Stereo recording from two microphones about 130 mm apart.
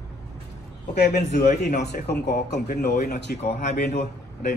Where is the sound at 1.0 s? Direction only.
70° left (ahead or behind).